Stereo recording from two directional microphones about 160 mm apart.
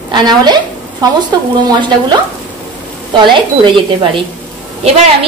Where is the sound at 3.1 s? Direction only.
30° right (ahead or behind).